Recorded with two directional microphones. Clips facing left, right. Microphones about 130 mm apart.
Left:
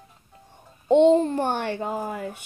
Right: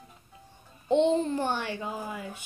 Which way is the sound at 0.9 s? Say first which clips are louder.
Left 7 dB; 55° left (ahead or behind).